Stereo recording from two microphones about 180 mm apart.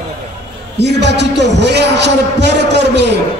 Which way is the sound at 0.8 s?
70° right (ahead or behind).